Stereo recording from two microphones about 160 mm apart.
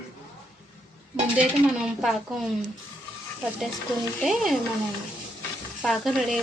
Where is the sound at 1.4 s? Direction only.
Centre (ahead or behind).